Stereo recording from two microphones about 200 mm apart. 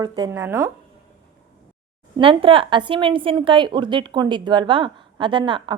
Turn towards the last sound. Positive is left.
turn(degrees=-25)  # may be behind; listen again after turning